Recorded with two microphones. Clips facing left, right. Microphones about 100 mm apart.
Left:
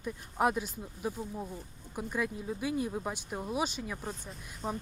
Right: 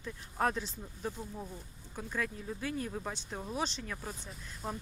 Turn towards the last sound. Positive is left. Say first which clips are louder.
# left 3 dB
turn(degrees=0)  # may be behind; listen again after turning